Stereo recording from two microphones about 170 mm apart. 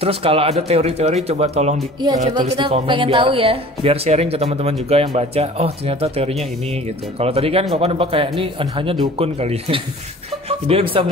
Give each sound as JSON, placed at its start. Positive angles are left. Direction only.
{"t": 0.0, "sound": "speech", "side_deg": -35}
{"t": 2.5, "sound": "speech", "side_deg": -30}